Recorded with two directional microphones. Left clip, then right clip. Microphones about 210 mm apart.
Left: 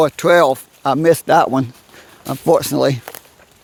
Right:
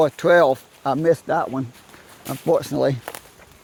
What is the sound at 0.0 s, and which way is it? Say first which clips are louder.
Speech: left 3 dB; 30° left (ahead or behind).